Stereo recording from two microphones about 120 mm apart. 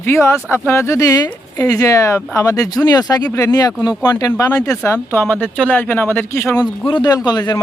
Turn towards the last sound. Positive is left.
turn(degrees=35)  # may be behind; listen again after turning